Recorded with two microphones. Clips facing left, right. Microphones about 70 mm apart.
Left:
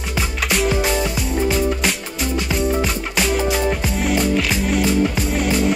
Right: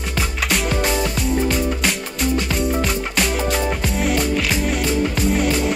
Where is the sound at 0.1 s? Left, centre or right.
Centre.